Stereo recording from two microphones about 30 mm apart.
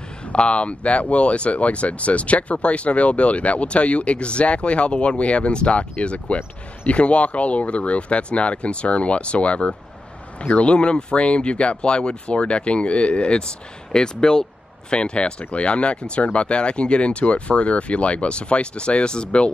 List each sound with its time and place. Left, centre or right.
0.3 s speech: left
13.9 s speech: left
14.9 s speech: left